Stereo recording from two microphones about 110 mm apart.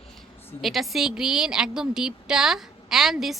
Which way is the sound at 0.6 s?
Centre (ahead or behind).